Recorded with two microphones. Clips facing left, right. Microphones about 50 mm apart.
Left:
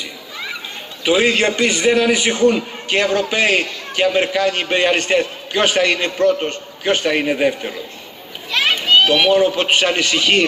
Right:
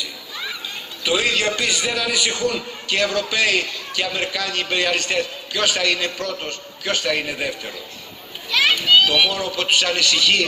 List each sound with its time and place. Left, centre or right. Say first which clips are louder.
1.0 s a man's voice: left 5 dB; left
8.5 s children playing: left 1 dB; left
9.0 s a man's voice: left 6 dB; left